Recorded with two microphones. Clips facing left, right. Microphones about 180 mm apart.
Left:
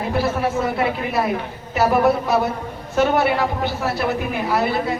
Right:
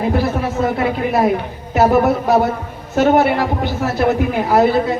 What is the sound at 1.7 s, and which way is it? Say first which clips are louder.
Speech: right 3 dB; 60° right (ahead or behind).